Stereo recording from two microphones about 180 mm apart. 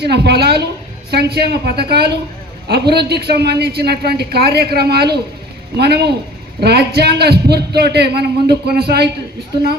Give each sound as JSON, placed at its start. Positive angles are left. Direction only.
{"t": 0.0, "sound": "speech", "side_deg": -65}